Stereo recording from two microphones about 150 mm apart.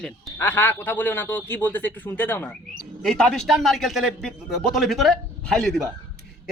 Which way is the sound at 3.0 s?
5° left (ahead or behind).